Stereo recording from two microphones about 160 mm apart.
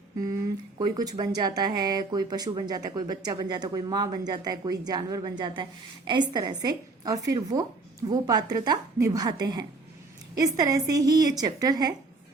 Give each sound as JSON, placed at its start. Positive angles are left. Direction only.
{"t": 0.2, "sound": "speech", "side_deg": -25}